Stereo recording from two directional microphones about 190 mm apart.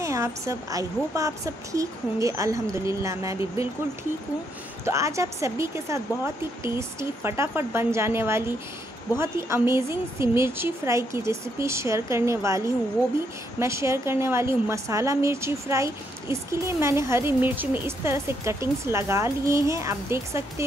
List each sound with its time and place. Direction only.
0.0 s a woman's voice: 15° right (ahead or behind)
4.8 s a woman's voice: 15° right (ahead or behind)